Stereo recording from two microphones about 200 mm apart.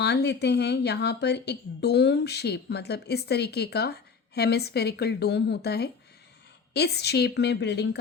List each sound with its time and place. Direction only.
0.0 s a woman's voice: 55° left (ahead or behind)